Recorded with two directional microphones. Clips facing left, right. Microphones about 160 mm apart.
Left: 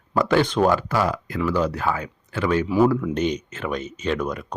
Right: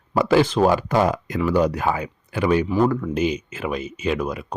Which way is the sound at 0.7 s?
20° right (ahead or behind).